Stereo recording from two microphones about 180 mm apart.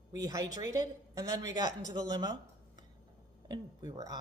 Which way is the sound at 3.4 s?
20° right (ahead or behind).